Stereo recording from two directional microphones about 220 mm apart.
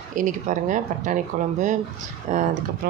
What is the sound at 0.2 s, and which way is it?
Speech, 35° right (ahead or behind).